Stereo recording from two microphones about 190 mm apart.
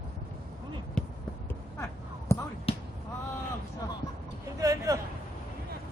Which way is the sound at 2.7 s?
30° left (ahead or behind).